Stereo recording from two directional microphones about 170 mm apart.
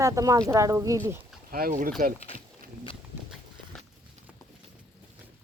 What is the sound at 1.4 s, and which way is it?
Speech, 60° right (ahead or behind).